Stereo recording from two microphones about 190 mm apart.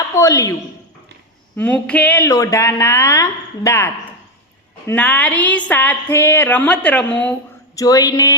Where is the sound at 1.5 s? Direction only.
10° left (ahead or behind).